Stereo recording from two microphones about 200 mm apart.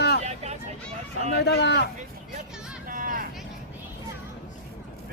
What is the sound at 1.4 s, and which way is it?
Speech, 55° left (ahead or behind).